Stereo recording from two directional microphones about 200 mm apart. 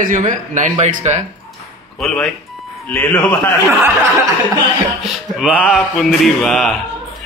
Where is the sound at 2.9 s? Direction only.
5° left (ahead or behind).